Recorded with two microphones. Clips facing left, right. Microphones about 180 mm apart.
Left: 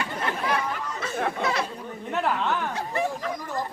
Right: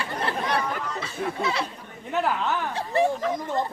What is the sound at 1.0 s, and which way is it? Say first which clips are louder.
Speech: left 4 dB; 50° left (ahead or behind).